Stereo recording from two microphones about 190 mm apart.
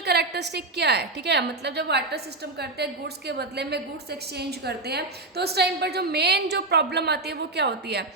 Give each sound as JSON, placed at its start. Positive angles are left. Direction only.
{"t": 0.0, "sound": "a woman's voice", "side_deg": -60}